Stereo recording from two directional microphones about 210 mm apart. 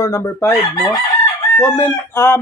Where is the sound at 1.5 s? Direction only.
10° left (ahead or behind).